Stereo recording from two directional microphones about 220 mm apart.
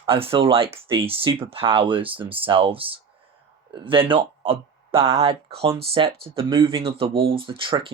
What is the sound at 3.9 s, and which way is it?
Speech, 25° right (ahead or behind).